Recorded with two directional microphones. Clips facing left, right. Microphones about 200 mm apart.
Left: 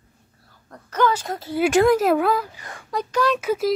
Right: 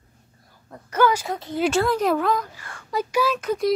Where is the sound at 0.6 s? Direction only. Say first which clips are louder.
Right 1 dB; 10° right (ahead or behind).